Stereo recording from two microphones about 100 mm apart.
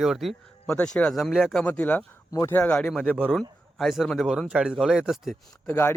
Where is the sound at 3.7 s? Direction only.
Centre (ahead or behind).